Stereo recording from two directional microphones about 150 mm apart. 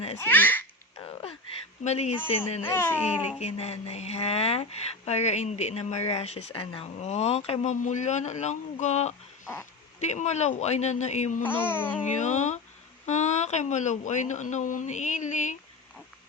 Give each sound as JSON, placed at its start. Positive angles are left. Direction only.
{"t": 0.2, "sound": "baby laughter", "side_deg": 10}
{"t": 1.8, "sound": "speech", "side_deg": 50}
{"t": 2.6, "sound": "speech", "side_deg": 15}
{"t": 3.4, "sound": "speech", "side_deg": 45}
{"t": 11.4, "sound": "speech", "side_deg": 15}
{"t": 12.1, "sound": "speech", "side_deg": 50}